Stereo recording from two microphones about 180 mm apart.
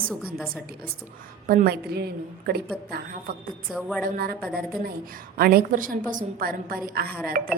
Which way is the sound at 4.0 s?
60° right (ahead or behind).